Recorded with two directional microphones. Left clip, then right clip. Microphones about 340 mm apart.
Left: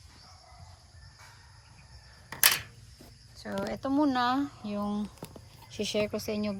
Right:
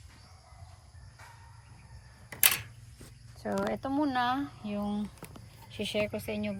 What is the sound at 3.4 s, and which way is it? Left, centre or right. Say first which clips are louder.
Speech: right 2 dB; centre.